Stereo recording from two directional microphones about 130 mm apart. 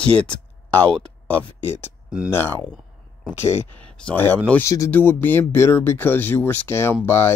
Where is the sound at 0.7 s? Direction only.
15° left (ahead or behind).